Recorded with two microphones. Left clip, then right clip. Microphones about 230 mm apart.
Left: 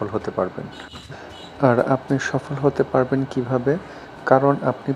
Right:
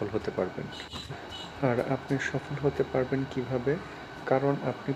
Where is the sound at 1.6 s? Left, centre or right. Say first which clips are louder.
Left 11 dB; left.